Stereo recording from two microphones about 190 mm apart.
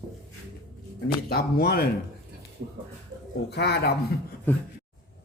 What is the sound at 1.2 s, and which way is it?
Speech, 55° left (ahead or behind).